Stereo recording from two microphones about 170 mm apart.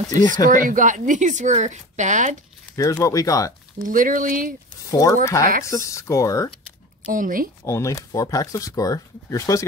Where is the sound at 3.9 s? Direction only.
55° right (ahead or behind).